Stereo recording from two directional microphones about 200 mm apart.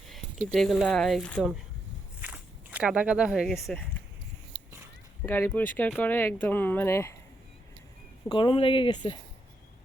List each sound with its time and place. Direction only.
0.1 s speech: centre (ahead or behind)
2.2 s speech: 10° right (ahead or behind)
5.2 s speech: 10° left (ahead or behind)
8.3 s speech: 25° left (ahead or behind)